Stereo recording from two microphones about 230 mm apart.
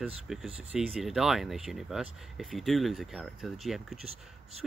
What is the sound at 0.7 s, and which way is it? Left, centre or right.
Speech, centre.